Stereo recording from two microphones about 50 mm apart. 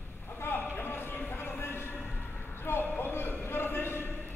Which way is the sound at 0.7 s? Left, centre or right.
Left.